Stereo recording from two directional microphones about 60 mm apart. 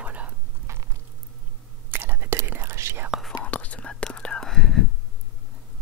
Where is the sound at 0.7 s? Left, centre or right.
Right.